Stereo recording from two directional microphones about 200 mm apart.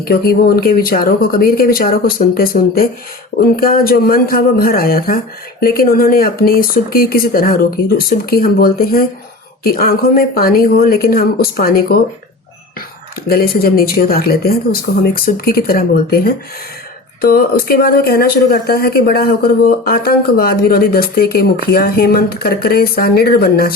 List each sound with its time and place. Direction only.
0.0 s speech: 50° left (ahead or behind)
13.2 s speech: 50° left (ahead or behind)